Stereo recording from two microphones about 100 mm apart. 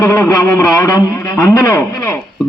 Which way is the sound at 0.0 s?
35° left (ahead or behind).